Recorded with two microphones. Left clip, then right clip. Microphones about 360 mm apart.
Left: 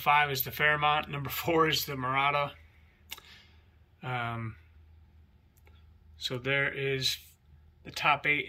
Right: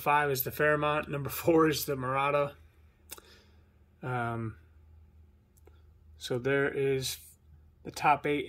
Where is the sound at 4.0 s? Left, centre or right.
Centre.